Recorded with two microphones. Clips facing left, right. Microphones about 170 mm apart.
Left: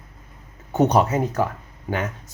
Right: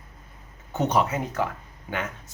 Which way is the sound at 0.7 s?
45° left (ahead or behind).